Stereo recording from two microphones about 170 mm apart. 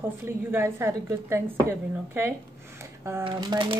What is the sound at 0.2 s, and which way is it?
A woman's voice, 15° right (ahead or behind).